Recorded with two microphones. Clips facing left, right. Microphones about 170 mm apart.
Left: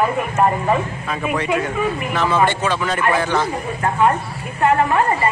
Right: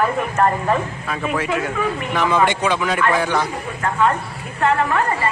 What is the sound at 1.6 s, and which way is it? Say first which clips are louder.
A man's voice: left 1 dB; 15° right (ahead or behind).